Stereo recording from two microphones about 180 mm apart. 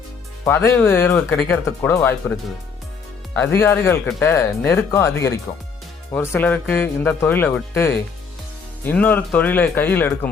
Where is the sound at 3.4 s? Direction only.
15° left (ahead or behind).